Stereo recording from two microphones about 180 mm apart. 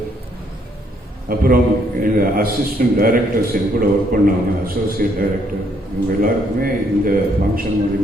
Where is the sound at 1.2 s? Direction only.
55° right (ahead or behind).